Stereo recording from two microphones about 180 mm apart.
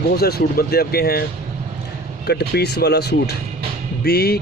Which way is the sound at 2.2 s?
65° left (ahead or behind).